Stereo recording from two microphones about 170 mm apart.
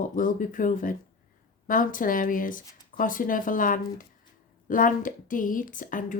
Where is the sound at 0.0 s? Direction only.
50° left (ahead or behind).